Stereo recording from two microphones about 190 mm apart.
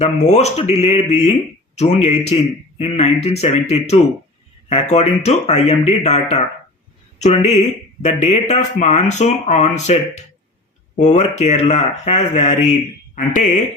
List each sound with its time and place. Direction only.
0.0 s speech: 35° left (ahead or behind)